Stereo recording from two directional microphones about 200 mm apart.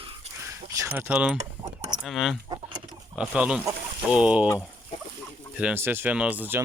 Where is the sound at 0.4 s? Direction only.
15° right (ahead or behind).